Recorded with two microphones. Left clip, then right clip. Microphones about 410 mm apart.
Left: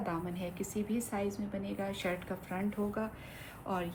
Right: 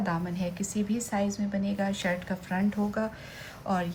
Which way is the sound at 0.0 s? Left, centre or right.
Right.